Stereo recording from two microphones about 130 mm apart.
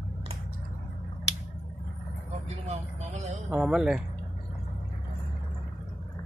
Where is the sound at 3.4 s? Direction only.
5° right (ahead or behind).